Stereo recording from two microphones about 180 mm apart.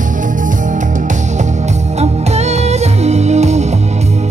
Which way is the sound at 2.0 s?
35° right (ahead or behind).